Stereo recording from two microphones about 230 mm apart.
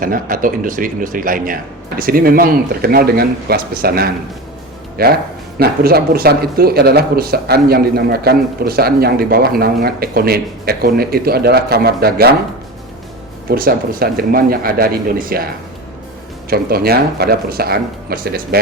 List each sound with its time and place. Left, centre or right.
0.0 s speech: right
13.5 s speech: right
16.5 s speech: right